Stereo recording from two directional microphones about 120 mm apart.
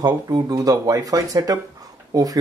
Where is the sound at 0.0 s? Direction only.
35° right (ahead or behind).